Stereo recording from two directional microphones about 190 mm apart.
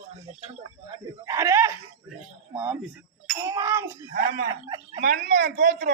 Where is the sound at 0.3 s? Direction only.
30° right (ahead or behind).